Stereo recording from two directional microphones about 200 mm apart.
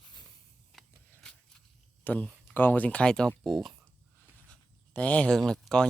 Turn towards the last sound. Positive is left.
turn(degrees=5)  # may be behind; listen again after turning